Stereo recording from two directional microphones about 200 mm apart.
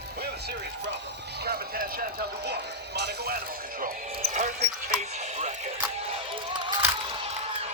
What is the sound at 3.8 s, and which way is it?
Basketball bounce, 40° right (ahead or behind).